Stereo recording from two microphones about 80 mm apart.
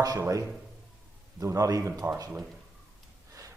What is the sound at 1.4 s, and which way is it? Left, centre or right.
Speech, right.